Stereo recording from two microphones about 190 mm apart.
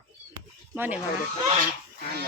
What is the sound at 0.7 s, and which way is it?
Speech, 10° right (ahead or behind).